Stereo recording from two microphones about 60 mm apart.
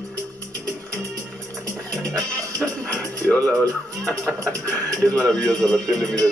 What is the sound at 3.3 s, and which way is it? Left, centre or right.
Speech, left.